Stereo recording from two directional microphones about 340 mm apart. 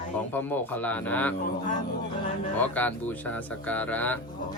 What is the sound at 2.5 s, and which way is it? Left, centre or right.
Speech, centre.